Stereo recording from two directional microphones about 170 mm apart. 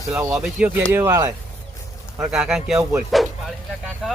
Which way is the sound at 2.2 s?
5° right (ahead or behind).